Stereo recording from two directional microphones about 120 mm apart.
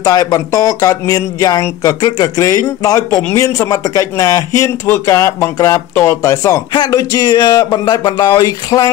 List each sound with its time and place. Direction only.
0.0 s speech: 30° left (ahead or behind)